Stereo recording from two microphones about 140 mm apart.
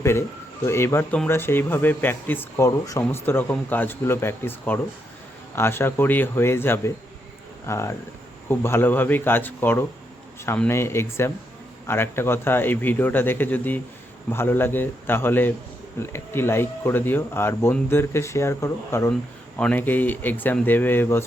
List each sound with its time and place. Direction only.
0.0 s speech: 20° left (ahead or behind)